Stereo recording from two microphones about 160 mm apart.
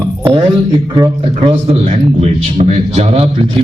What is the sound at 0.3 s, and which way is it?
A man's voice, 30° right (ahead or behind).